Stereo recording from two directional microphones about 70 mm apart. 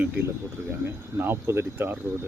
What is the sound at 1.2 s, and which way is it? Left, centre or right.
Speech, right.